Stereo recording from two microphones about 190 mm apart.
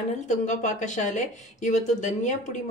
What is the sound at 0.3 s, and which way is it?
A woman's voice, 40° left (ahead or behind).